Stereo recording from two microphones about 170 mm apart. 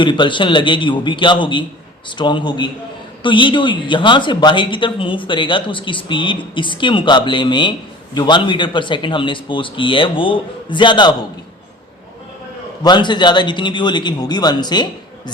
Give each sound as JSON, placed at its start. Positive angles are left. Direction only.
{"t": 0.0, "sound": "speech", "side_deg": 30}
{"t": 12.8, "sound": "speech", "side_deg": 25}